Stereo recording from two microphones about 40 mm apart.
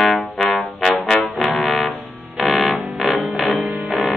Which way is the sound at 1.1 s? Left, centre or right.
Left.